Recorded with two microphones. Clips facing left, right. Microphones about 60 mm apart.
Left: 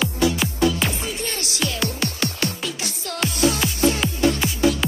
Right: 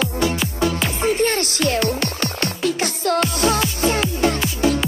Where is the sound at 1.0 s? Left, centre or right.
Right.